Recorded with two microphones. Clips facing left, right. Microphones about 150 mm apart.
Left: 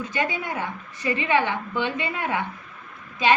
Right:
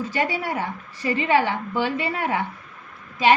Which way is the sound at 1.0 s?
35° right (ahead or behind).